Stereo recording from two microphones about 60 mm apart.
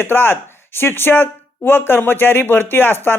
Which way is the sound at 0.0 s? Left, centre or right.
Left.